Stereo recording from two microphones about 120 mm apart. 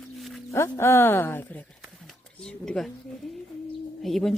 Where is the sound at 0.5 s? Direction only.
20° left (ahead or behind).